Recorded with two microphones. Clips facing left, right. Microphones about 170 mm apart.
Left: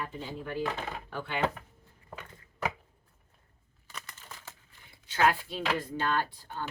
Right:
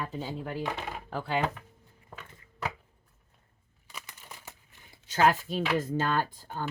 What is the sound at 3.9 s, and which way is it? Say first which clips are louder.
Crushing: even; 10° right (ahead or behind).